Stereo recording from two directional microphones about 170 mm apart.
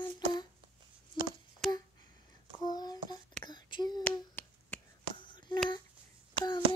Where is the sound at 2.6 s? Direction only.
25° left (ahead or behind).